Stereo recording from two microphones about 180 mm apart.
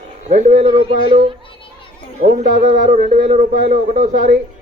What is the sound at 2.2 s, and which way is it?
Speech, 50° right (ahead or behind).